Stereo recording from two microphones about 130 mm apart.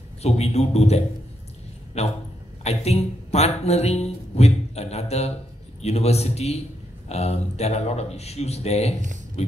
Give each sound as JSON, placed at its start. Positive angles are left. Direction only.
{"t": 0.2, "sound": "speech", "side_deg": 55}
{"t": 9.4, "sound": "music", "side_deg": 55}